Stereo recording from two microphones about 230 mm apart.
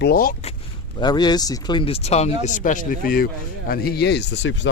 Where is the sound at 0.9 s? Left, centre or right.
Centre.